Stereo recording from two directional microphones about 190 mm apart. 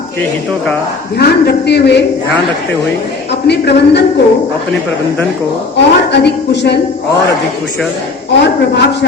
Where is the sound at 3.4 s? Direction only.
65° left (ahead or behind).